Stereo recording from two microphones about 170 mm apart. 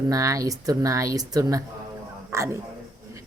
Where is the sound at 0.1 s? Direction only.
20° right (ahead or behind).